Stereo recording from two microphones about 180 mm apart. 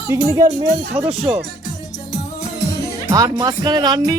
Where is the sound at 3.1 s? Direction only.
20° right (ahead or behind).